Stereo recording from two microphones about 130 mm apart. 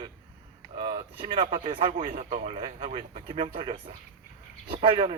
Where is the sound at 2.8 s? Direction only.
45° right (ahead or behind).